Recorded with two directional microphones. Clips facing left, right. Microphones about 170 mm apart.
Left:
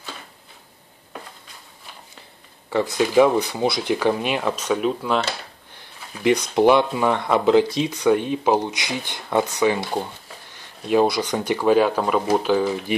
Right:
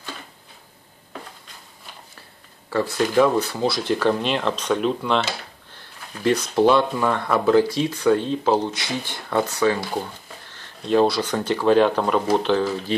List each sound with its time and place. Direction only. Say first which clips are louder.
2.7 s speech: left 2 dB; 20° left (ahead or behind)